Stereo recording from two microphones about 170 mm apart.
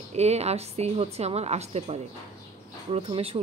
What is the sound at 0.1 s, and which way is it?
Speech, 40° right (ahead or behind).